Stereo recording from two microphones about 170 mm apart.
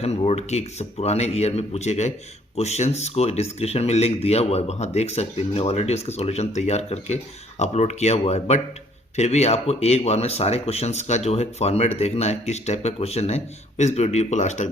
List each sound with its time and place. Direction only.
0.0 s speech: 40° left (ahead or behind)